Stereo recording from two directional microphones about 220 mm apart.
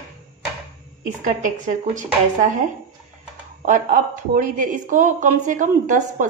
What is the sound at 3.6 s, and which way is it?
Speech, 35° right (ahead or behind).